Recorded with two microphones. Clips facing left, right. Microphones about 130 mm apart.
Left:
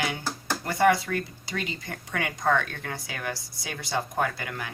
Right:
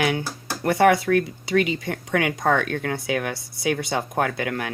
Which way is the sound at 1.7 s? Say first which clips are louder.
Right 9 dB; 85° right.